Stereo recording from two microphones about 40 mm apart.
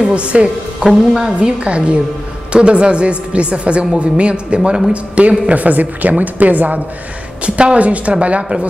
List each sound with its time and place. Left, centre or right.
0.0 s a woman's voice: right
0.8 s a woman's voice: centre
1.6 s a woman's voice: right
7.4 s a woman's voice: right